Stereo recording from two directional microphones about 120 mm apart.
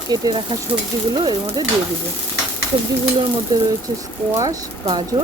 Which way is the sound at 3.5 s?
30° right (ahead or behind).